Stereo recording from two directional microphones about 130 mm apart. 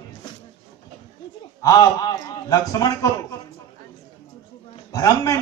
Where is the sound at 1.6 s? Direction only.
30° left (ahead or behind).